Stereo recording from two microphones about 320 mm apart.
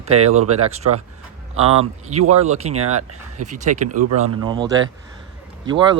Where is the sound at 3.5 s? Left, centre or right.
Right.